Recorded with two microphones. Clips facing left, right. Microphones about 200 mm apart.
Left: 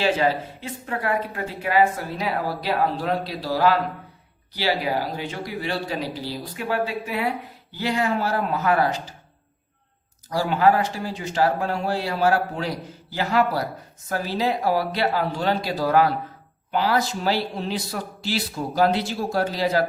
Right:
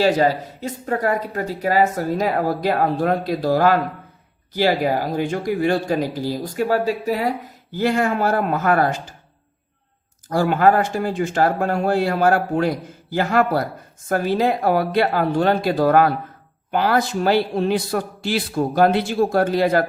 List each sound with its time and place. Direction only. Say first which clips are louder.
0.0 s speech: right 4 dB; 40° right (ahead or behind)
10.2 s speech: right 3 dB; 50° right (ahead or behind)